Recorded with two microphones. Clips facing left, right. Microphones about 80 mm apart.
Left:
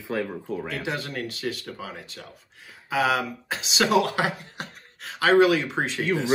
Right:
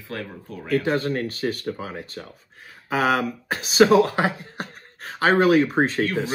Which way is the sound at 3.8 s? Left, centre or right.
Right.